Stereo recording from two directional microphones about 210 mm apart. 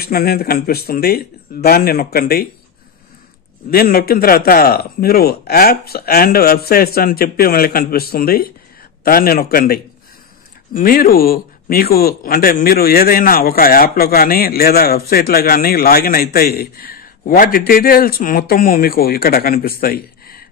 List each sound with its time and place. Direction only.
0.0 s speech: 45° left (ahead or behind)
3.7 s speech: 45° left (ahead or behind)
19.8 s a sound: 45° left (ahead or behind)